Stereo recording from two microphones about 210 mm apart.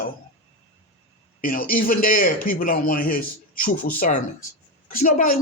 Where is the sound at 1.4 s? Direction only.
45° left (ahead or behind).